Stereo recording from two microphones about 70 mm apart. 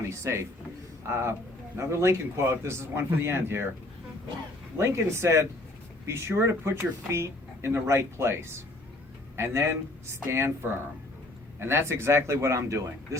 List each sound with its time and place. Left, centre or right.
0.1 s a man's voice: right
4.8 s a man's voice: right